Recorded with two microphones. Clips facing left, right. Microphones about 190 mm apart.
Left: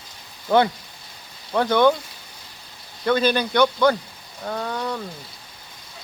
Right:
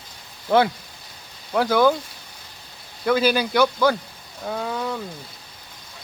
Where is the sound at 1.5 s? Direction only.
5° right (ahead or behind).